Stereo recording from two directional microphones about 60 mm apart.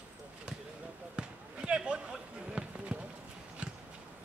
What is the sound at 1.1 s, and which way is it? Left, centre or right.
Basketball bounce, centre.